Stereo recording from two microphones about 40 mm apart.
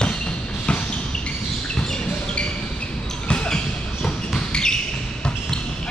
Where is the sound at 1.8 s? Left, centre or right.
Left.